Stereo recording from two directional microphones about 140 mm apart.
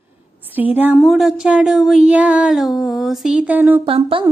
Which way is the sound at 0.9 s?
Centre (ahead or behind).